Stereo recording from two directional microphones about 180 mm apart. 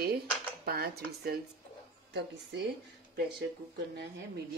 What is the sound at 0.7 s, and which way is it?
Speech, 60° right (ahead or behind).